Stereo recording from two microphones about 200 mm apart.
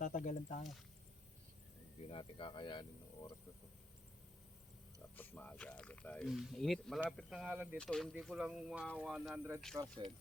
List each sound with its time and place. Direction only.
0.0 s speech: 40° left (ahead or behind)
2.0 s speech: 25° left (ahead or behind)
5.1 s speech: 10° left (ahead or behind); by 9.6 s 5° right (ahead or behind)
10.0 s speech: 20° right (ahead or behind)